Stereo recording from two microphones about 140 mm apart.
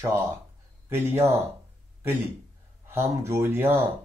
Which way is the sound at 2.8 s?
15° right (ahead or behind).